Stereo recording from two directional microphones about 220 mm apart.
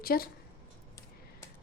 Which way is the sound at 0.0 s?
45° left (ahead or behind).